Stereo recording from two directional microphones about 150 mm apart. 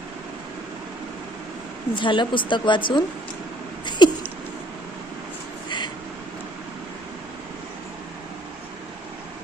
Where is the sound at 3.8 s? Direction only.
30° left (ahead or behind).